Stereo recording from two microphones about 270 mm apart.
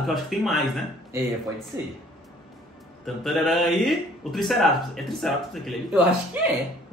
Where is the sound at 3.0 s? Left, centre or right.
Centre.